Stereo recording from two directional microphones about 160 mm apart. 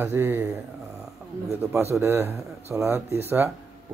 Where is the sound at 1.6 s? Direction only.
20° right (ahead or behind).